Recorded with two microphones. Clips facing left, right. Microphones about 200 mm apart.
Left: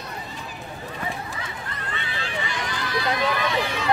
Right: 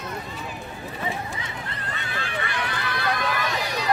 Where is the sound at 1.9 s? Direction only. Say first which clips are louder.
Even; 50° right (ahead or behind).